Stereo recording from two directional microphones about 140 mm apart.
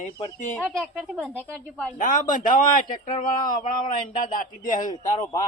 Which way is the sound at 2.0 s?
65° left (ahead or behind).